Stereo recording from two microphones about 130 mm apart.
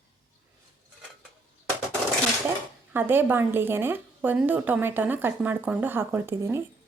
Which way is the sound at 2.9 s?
15° right (ahead or behind).